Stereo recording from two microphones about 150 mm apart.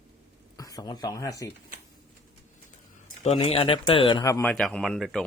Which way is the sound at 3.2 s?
45° left (ahead or behind).